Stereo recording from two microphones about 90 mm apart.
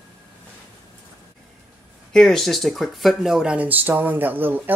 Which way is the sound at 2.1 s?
5° left (ahead or behind).